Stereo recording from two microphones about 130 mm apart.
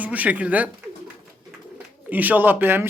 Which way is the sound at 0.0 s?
10° right (ahead or behind).